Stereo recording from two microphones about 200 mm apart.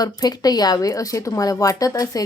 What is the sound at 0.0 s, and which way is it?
Speech, 20° left (ahead or behind).